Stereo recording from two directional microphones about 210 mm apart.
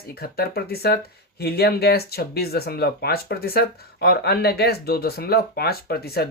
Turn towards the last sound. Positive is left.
turn(degrees=50)  # may be behind; listen again after turning